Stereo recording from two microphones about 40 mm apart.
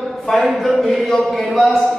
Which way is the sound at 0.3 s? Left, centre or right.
Centre.